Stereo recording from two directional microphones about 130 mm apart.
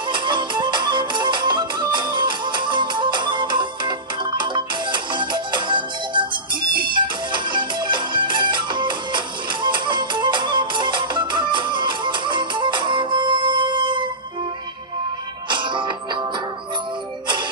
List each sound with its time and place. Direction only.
0.1 s music: 35° right (ahead or behind)
15.5 s music: 35° right (ahead or behind)